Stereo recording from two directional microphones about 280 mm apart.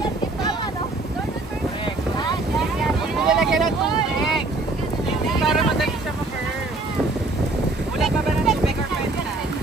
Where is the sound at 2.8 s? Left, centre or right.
Centre.